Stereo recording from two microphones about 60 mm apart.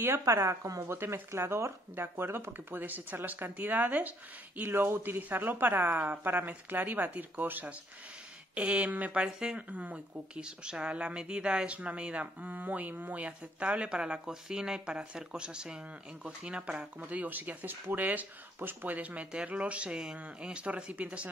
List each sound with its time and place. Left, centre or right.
0.2 s speech: right
0.8 s speech: right
9.2 s speech: centre